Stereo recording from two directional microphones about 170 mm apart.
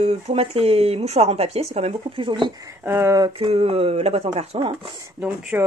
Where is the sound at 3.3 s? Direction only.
35° right (ahead or behind).